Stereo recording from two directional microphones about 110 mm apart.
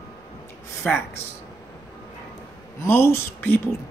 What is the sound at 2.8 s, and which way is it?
Speech, 25° left (ahead or behind).